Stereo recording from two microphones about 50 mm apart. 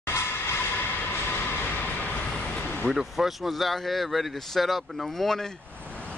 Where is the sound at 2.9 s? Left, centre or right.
Centre.